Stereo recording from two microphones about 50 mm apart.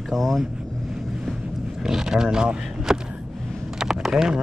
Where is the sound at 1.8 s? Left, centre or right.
Centre.